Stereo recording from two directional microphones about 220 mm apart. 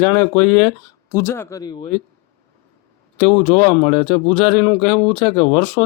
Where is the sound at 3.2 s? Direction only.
25° left (ahead or behind).